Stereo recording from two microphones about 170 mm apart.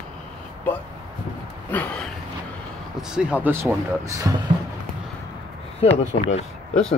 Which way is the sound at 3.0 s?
5° right (ahead or behind).